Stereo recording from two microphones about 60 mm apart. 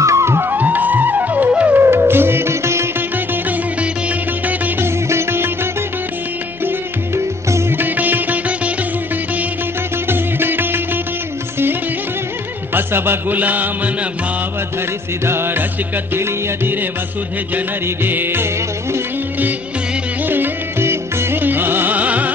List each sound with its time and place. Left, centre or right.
0.0 s music: right
0.6 s music: right
4.5 s music: right
7.7 s music: right
10.0 s music: right
12.7 s music: right
15.2 s music: right
17.8 s music: right
20.2 s music: right